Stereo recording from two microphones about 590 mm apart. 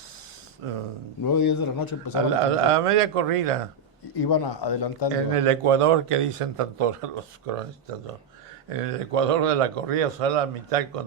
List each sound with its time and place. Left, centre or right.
0.6 s speech: right
1.2 s a man's voice: left
2.4 s speech: right
4.2 s a man's voice: left
5.3 s speech: right
8.7 s speech: right